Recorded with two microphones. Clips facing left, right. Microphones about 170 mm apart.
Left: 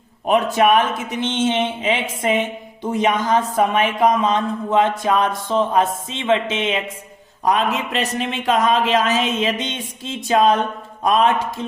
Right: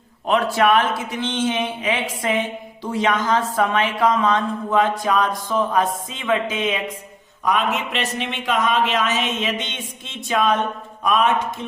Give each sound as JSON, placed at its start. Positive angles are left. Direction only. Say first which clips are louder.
{"t": 0.3, "sound": "speech", "louder": "left 2 dB", "side_deg": 20}